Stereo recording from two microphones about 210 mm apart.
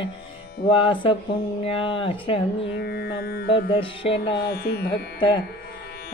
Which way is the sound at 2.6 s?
50° left (ahead or behind).